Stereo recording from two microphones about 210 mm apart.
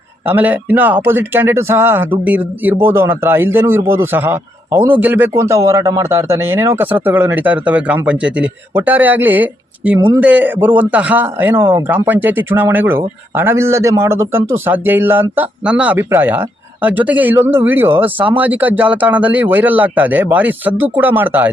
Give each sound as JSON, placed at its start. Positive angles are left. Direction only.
{"t": 0.3, "sound": "speech", "side_deg": -10}